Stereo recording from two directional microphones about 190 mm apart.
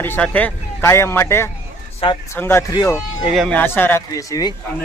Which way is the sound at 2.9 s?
5° right (ahead or behind).